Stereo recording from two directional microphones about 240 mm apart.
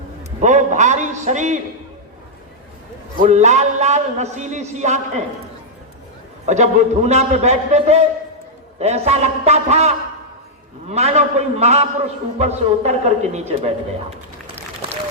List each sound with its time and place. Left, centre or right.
0.3 s a man's voice: right
3.2 s a man's voice: right
6.4 s a man's voice: right